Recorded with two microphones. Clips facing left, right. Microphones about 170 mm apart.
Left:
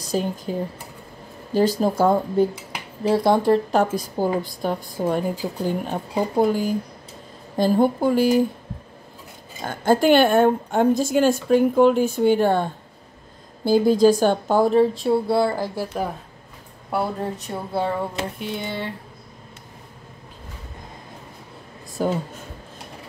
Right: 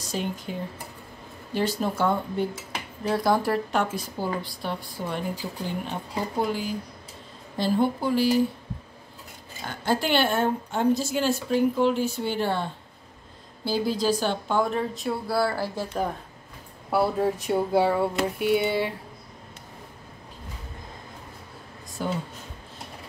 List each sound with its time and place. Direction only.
0.1 s speech: 40° left (ahead or behind)
1.8 s speech: 40° left (ahead or behind)
3.0 s speech: 25° left (ahead or behind)
3.7 s a woman's voice: 40° left (ahead or behind)
9.6 s a woman's voice: 45° left (ahead or behind)
13.7 s a woman's voice: 50° left (ahead or behind)
15.0 s speech: 25° left (ahead or behind)
16.9 s speech: 10° right (ahead or behind)
22.0 s a woman's voice: 45° left (ahead or behind)